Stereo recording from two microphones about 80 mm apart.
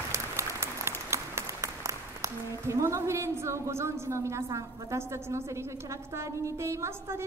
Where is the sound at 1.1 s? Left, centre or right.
Right.